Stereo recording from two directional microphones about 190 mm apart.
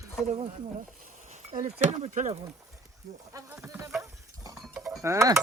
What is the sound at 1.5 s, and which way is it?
Speech, 40° right (ahead or behind).